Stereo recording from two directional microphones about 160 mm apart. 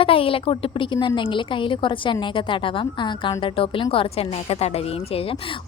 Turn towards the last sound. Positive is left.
turn(degrees=35)  # may be behind; listen again after turning